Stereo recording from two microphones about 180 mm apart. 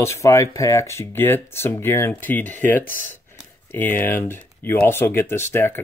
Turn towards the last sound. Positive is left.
turn(degrees=10)  # may be behind; listen again after turning